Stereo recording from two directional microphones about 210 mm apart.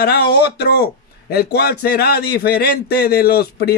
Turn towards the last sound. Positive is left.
turn(degrees=50)  # may be behind; listen again after turning